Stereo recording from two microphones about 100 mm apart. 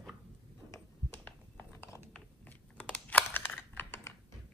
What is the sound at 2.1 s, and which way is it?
Computer keyboard, 15° left (ahead or behind).